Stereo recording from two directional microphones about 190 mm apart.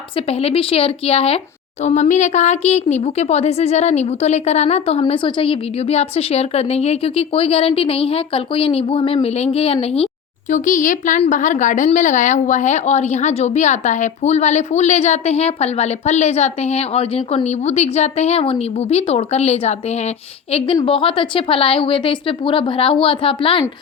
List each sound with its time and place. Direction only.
0.3 s a woman's voice: 30° left (ahead or behind)
10.5 s a woman's voice: 40° left (ahead or behind)
20.8 s a woman's voice: 30° left (ahead or behind)